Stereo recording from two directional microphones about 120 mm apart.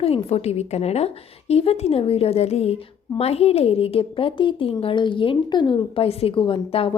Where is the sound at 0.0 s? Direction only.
55° left (ahead or behind).